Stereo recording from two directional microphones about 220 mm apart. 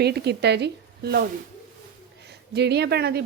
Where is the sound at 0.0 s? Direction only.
50° right (ahead or behind).